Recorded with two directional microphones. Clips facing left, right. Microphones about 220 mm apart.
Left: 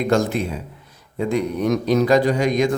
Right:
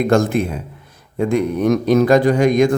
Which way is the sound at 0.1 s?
50° right (ahead or behind).